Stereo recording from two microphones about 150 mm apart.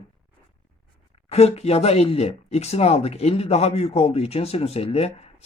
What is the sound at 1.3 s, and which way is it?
Speech, 45° left (ahead or behind).